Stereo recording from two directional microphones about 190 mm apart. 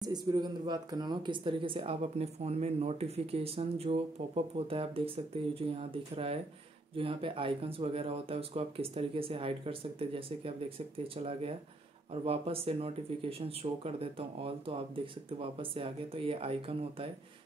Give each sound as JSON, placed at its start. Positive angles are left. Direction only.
{"t": 0.0, "sound": "speech", "side_deg": -20}
{"t": 12.1, "sound": "speech", "side_deg": -30}